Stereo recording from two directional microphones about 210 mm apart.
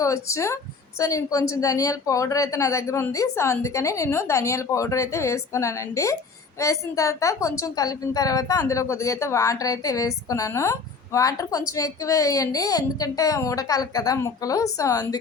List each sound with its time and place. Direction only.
0.0 s speech: 15° left (ahead or behind)